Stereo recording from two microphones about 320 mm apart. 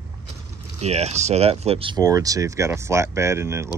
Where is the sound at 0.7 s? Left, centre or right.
Centre.